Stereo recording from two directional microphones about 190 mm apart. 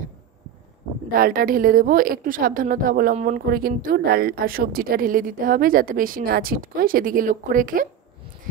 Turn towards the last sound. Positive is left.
turn(degrees=-45)  # may be behind; listen again after turning